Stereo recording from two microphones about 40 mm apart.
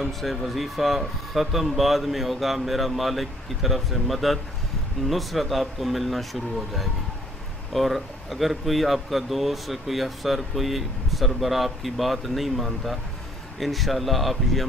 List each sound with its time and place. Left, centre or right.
0.0 s speech: centre
7.7 s speech: centre